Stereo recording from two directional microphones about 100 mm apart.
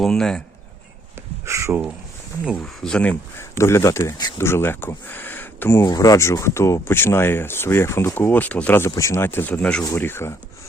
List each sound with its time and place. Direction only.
0.0 s speech: 5° left (ahead or behind)
1.5 s a sound: 30° right (ahead or behind)
2.8 s speech: 10° left (ahead or behind)
3.3 s speech: 25° left (ahead or behind)
5.8 s speech: 40° left (ahead or behind); by 9.8 s 10° left (ahead or behind)
9.9 s speech: 25° left (ahead or behind)